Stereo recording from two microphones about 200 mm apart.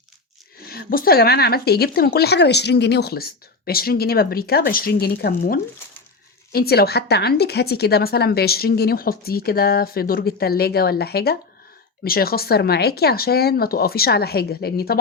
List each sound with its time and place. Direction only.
0.6 s speech: 50° left (ahead or behind)